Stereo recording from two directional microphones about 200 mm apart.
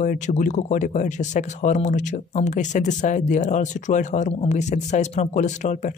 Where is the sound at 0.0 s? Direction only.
40° left (ahead or behind).